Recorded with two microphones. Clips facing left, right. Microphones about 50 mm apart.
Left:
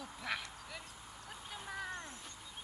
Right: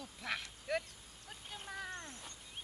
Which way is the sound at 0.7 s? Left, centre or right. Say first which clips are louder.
Right 16 dB; right.